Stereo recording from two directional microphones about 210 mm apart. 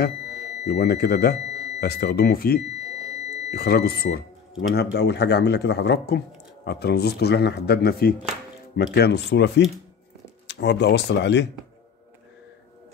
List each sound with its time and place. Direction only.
0.7 s speech: 50° left (ahead or behind)